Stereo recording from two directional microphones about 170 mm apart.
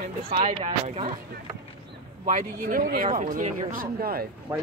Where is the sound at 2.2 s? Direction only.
55° right (ahead or behind).